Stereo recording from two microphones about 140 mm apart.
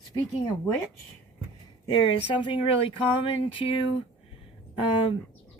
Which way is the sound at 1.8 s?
35° left (ahead or behind).